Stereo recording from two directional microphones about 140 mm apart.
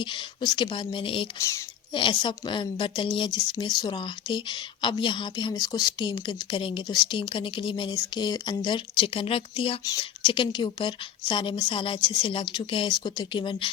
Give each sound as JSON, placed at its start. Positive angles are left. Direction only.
{"t": 0.0, "sound": "a woman's voice", "side_deg": 35}
{"t": 1.4, "sound": "speech", "side_deg": 20}
{"t": 1.9, "sound": "a woman's voice", "side_deg": 35}